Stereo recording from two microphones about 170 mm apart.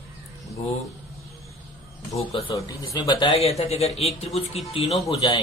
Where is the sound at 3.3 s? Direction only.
40° left (ahead or behind).